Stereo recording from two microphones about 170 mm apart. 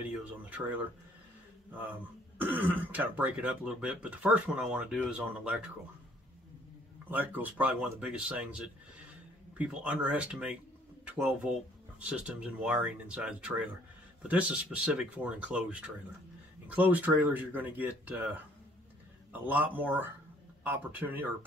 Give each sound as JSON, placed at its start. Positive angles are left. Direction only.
{"t": 0.0, "sound": "speech", "side_deg": -10}
{"t": 2.4, "sound": "speech", "side_deg": -10}
{"t": 7.1, "sound": "speech", "side_deg": -10}
{"t": 19.4, "sound": "speech", "side_deg": -10}